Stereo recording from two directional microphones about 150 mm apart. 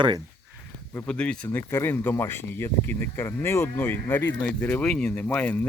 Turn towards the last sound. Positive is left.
turn(degrees=10)  # may be behind; listen again after turning